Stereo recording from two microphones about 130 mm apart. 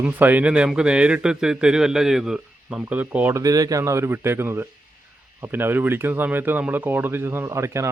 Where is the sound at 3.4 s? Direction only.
25° right (ahead or behind).